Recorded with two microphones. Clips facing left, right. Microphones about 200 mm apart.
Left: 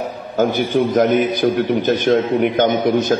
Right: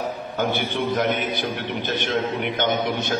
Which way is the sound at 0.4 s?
40° left (ahead or behind).